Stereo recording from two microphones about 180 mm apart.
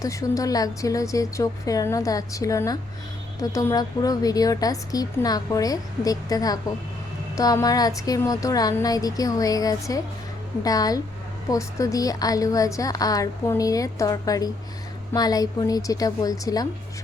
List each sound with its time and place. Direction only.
0.0 s a woman's voice: 20° left (ahead or behind)